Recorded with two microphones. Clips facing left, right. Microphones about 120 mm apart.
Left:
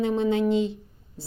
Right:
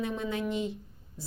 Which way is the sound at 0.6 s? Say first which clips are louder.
Left 5 dB; 30° left (ahead or behind).